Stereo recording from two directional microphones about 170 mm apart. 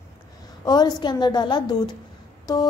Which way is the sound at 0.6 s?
25° left (ahead or behind).